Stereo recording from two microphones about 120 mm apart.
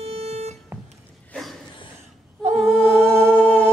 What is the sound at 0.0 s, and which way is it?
Music, 65° right (ahead or behind).